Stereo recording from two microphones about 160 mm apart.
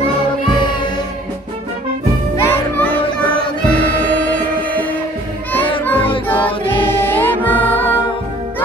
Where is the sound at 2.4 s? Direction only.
10° left (ahead or behind).